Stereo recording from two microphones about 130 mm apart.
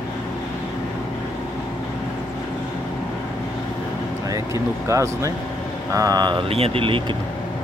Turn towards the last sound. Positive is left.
turn(degrees=-40)  # may be behind; listen again after turning